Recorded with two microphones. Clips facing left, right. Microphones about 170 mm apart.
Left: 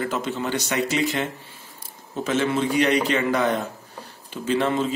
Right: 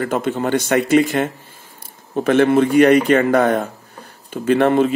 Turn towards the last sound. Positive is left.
turn(degrees=-60)  # may be behind; listen again after turning